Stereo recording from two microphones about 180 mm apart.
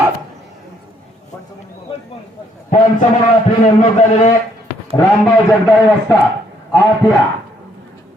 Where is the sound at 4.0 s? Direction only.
40° left (ahead or behind).